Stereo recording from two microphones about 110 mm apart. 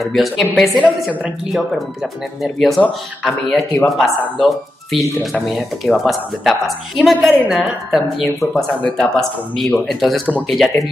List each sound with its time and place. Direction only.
0.0 s speech: centre (ahead or behind)